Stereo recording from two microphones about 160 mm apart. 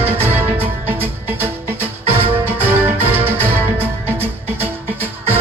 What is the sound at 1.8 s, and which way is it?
Music, 35° right (ahead or behind).